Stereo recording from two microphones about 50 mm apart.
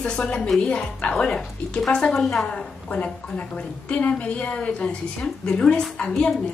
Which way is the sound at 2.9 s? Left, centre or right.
Left.